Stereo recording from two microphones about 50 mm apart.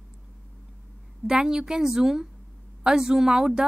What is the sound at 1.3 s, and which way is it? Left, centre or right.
A woman's voice, centre.